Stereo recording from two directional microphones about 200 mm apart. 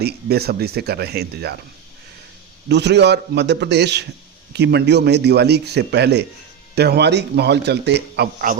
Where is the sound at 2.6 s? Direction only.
60° right (ahead or behind).